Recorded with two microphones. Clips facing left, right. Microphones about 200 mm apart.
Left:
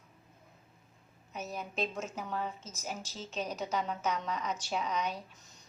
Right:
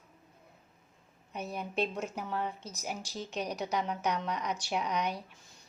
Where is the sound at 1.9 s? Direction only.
10° right (ahead or behind).